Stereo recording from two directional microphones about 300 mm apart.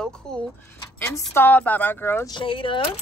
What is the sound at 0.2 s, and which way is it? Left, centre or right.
Speech, centre.